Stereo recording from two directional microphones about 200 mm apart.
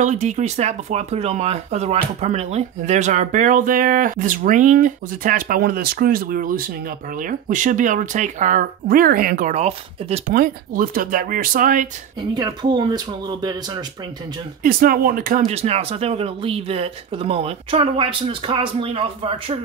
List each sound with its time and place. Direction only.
0.0 s speech: 35° right (ahead or behind)
12.4 s speech: 20° right (ahead or behind)
14.6 s speech: 45° right (ahead or behind); by 19.6 s 25° right (ahead or behind)